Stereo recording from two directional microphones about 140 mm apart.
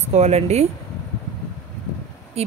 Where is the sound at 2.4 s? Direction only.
45° right (ahead or behind).